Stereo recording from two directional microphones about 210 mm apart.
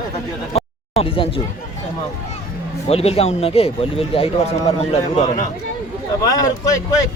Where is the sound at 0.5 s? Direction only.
25° left (ahead or behind).